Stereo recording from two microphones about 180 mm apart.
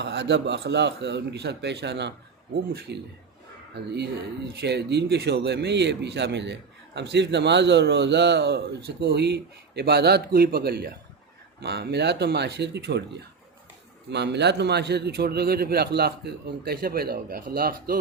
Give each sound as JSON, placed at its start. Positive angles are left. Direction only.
{"t": 0.0, "sound": "speech", "side_deg": -70}
{"t": 2.6, "sound": "a man's voice", "side_deg": -65}
{"t": 4.6, "sound": "a man's voice", "side_deg": -65}